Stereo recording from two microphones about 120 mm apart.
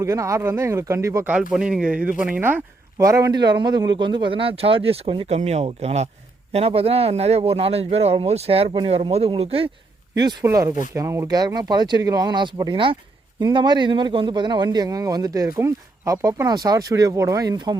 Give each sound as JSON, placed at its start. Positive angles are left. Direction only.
{"t": 0.0, "sound": "speech", "side_deg": -25}
{"t": 1.3, "sound": "speech", "side_deg": -10}
{"t": 3.1, "sound": "a man's voice", "side_deg": -30}
{"t": 5.3, "sound": "speech", "side_deg": -70}
{"t": 8.9, "sound": "speech", "side_deg": -60}
{"t": 10.4, "sound": "a man's voice", "side_deg": -20}